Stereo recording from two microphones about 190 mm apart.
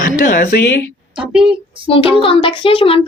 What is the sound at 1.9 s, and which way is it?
A child's voice, 30° left (ahead or behind).